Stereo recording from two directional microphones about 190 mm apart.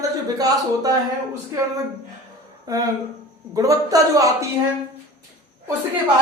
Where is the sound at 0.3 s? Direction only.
20° right (ahead or behind).